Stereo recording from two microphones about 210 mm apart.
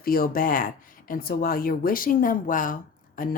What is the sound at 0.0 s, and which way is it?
Speech, 45° left (ahead or behind).